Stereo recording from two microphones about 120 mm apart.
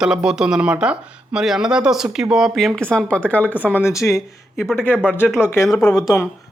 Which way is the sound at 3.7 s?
25° left (ahead or behind).